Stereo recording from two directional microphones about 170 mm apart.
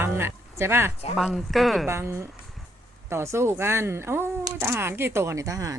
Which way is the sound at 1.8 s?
15° right (ahead or behind).